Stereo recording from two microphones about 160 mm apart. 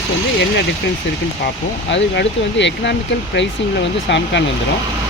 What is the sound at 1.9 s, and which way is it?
Speech, 90° left.